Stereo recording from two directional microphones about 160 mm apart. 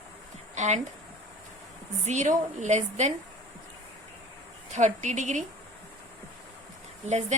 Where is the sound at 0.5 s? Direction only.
45° right (ahead or behind).